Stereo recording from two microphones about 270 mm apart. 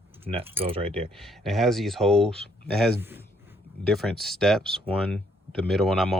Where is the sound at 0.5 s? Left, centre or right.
Right.